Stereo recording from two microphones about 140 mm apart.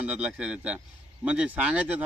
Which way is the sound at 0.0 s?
10° right (ahead or behind).